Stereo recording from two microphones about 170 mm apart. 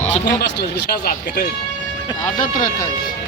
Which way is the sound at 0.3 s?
75° left (ahead or behind).